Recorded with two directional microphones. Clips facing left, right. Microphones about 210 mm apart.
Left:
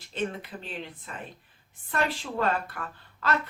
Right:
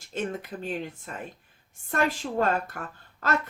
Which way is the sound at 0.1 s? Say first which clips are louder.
Right 1 dB; 45° right (ahead or behind).